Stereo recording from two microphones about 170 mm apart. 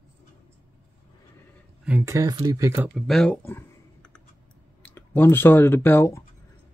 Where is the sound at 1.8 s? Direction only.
15° right (ahead or behind).